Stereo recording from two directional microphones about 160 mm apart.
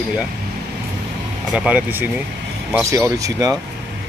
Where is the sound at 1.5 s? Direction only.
10° right (ahead or behind).